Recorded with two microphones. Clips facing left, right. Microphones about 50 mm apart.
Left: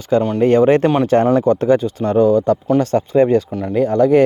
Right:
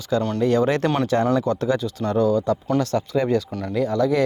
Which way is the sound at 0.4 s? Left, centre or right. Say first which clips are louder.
Left 8 dB; left.